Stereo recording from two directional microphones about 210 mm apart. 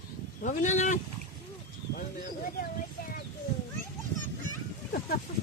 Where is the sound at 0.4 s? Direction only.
35° left (ahead or behind).